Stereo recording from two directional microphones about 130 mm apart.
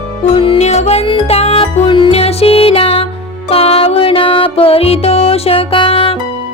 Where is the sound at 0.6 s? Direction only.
60° left (ahead or behind).